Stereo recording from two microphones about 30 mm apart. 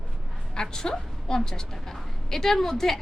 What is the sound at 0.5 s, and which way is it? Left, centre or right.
A woman's voice, left.